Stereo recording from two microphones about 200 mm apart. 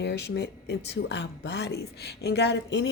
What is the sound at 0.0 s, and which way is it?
A woman's voice, 60° left (ahead or behind).